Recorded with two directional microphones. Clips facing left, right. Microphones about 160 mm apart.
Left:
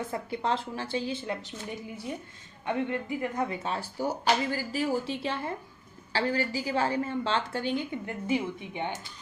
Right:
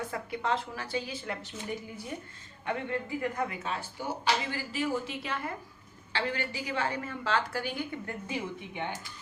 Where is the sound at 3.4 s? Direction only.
30° left (ahead or behind).